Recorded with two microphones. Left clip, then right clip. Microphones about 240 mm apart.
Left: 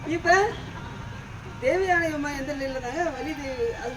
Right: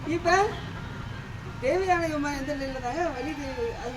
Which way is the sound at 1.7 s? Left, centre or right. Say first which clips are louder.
Left 2 dB; centre.